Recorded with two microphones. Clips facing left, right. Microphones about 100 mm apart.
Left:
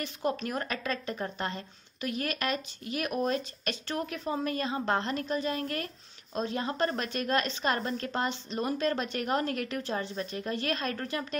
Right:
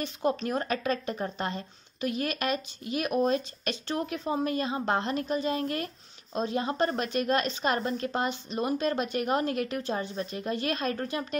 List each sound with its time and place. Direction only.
0.0 s a woman's voice: 20° right (ahead or behind)